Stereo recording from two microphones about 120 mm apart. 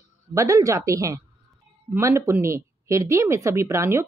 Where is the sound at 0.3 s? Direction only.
25° right (ahead or behind).